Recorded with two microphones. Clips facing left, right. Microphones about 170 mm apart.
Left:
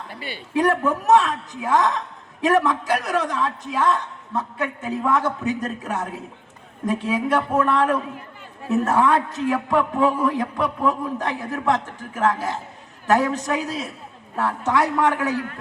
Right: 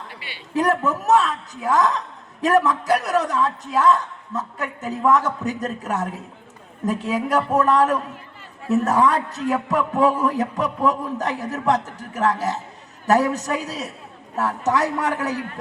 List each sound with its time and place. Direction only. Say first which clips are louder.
0.5 s a man's voice: left 1 dB; 40° right (ahead or behind)